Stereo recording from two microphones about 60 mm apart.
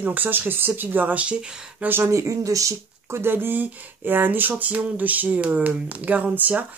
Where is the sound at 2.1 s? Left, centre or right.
Right.